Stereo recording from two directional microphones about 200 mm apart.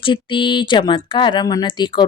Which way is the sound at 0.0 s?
25° left (ahead or behind).